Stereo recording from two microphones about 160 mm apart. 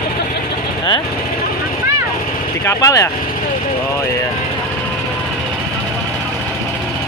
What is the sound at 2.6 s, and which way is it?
Speech, 20° left (ahead or behind).